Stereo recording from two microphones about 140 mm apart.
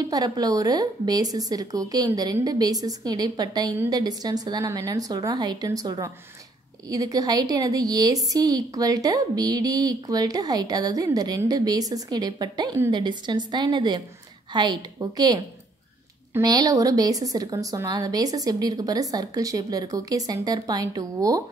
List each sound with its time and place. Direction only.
0.1 s a woman's voice: 25° right (ahead or behind)